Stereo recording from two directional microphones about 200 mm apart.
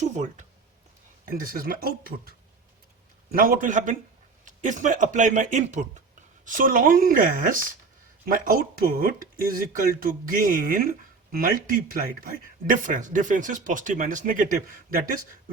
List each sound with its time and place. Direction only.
0.0 s speech: 35° right (ahead or behind)
3.3 s speech: 45° right (ahead or behind)